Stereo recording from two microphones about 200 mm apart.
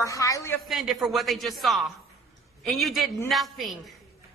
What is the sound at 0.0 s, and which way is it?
Speech, 15° left (ahead or behind).